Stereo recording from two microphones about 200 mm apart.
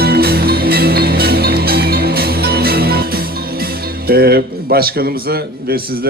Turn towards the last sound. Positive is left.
turn(degrees=-50)  # may be behind; listen again after turning